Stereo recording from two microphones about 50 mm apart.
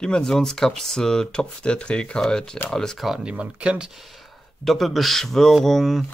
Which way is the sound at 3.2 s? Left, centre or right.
Right.